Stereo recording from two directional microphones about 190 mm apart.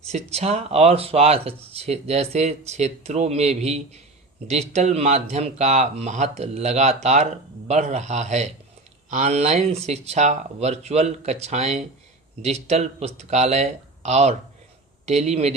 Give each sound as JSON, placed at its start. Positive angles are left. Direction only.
{"t": 0.1, "sound": "speech", "side_deg": -35}